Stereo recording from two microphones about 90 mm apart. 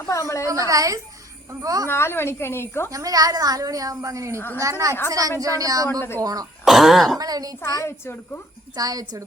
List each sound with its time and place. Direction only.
0.1 s a woman's voice: 35° left (ahead or behind)
0.7 s a woman's voice: 40° right (ahead or behind)
1.9 s a woman's voice: 25° left (ahead or behind)
2.9 s a woman's voice: 40° right (ahead or behind)
4.4 s a woman's voice: 25° left (ahead or behind)
4.6 s a woman's voice: 40° right (ahead or behind)
6.7 s throat clearing: centre (ahead or behind)
7.2 s a woman's voice: 45° right (ahead or behind)
7.7 s a woman's voice: 30° left (ahead or behind)
8.7 s a woman's voice: 45° right (ahead or behind)